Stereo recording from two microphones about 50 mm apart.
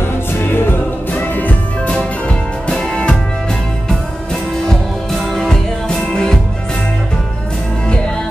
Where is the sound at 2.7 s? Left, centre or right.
Centre.